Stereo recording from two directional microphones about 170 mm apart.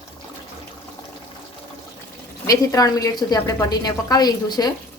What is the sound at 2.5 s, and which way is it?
A woman's voice, 20° left (ahead or behind).